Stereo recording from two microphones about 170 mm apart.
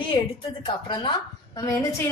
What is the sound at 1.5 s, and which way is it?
Speech, 20° left (ahead or behind).